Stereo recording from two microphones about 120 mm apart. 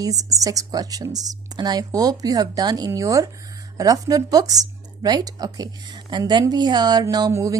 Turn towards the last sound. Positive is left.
turn(degrees=-30)  # may be behind; listen again after turning